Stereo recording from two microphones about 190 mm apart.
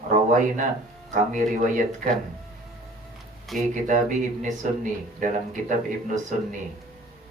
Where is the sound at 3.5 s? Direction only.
Centre (ahead or behind).